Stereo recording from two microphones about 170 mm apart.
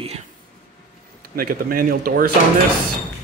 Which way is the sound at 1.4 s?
55° right (ahead or behind).